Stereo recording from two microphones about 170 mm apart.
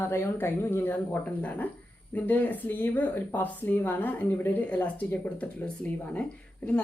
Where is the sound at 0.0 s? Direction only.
15° left (ahead or behind).